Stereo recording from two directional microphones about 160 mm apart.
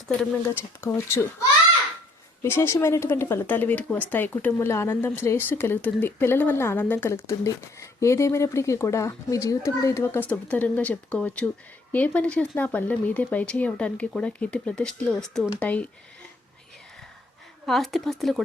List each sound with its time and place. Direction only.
0.4 s speech: 15° left (ahead or behind)
2.4 s speech: 15° left (ahead or behind)
17.7 s speech: centre (ahead or behind)